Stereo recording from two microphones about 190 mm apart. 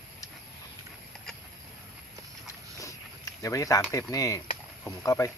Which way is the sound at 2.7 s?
15° left (ahead or behind).